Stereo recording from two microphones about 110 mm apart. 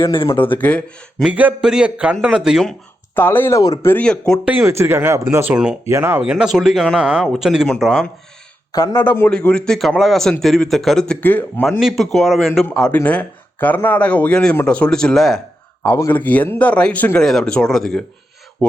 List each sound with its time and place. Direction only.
0.0 s speech: 50° left (ahead or behind)
0.5 s a man's voice: 15° left (ahead or behind)
1.2 s a man's voice: 15° right (ahead or behind)
3.2 s a man's voice: 20° left (ahead or behind)
4.6 s speech: 25° right (ahead or behind)
6.1 s a man's voice: 10° right (ahead or behind)
8.7 s a man's voice: 35° left (ahead or behind)
9.0 s a man's voice: 20° left (ahead or behind)
11.6 s a man's voice: centre (ahead or behind)
15.9 s a man's voice: 20° left (ahead or behind); by 18.0 s 5° left (ahead or behind)